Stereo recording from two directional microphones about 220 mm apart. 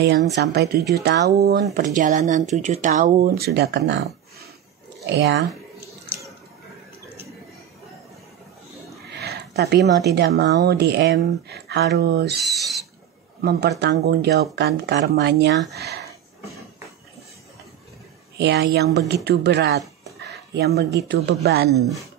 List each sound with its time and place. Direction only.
0.4 s speech: 50° right (ahead or behind)
1.7 s speech: 35° right (ahead or behind); by 5.4 s 55° right (ahead or behind)
9.1 s speech: 45° right (ahead or behind)
12.4 s speech: centre (ahead or behind)
13.4 s speech: 45° right (ahead or behind)
18.4 s speech: 50° right (ahead or behind)
20.2 s a sound: 50° right (ahead or behind)
21.1 s speech: 50° right (ahead or behind)